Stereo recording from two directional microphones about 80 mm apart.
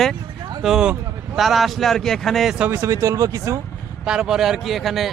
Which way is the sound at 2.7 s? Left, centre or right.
Right.